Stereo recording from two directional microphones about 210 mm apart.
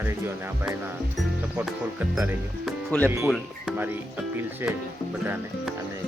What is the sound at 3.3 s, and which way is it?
Speech, 5° right (ahead or behind).